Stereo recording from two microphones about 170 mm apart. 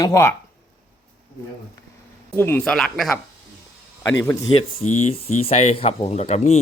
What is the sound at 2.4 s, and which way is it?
Speech, 10° left (ahead or behind).